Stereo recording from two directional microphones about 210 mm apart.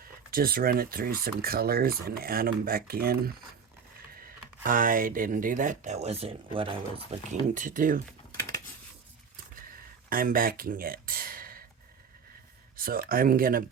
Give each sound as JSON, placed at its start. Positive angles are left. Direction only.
{"t": 0.3, "sound": "speech", "side_deg": -45}
{"t": 7.1, "sound": "speech", "side_deg": -35}
{"t": 8.3, "sound": "a sound", "side_deg": 10}
{"t": 10.1, "sound": "speech", "side_deg": -45}
{"t": 12.7, "sound": "speech", "side_deg": -45}